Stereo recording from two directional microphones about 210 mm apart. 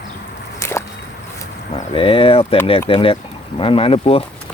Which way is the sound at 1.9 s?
25° left (ahead or behind).